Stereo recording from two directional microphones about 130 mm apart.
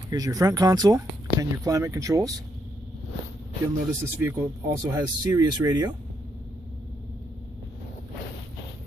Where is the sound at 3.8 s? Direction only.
15° right (ahead or behind).